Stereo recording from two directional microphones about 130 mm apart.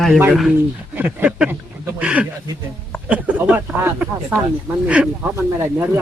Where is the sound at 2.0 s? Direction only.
10° right (ahead or behind).